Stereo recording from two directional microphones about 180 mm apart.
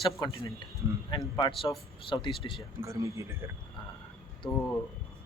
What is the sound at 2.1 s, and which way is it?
Speech, 25° left (ahead or behind).